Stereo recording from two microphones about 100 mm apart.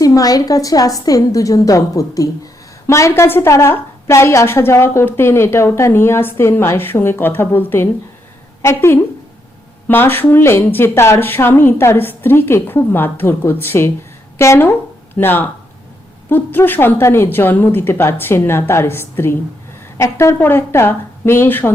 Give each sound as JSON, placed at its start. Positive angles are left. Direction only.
{"t": 0.0, "sound": "a woman's voice", "side_deg": 40}